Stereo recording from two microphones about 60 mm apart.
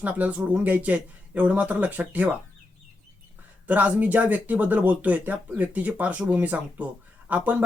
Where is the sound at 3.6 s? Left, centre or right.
Right.